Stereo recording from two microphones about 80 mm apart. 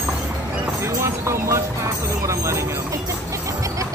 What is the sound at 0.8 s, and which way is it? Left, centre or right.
Clip-clop, right.